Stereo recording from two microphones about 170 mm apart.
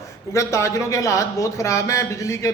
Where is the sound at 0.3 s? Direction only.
15° left (ahead or behind).